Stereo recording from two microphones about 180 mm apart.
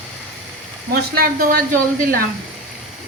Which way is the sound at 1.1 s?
55° right (ahead or behind).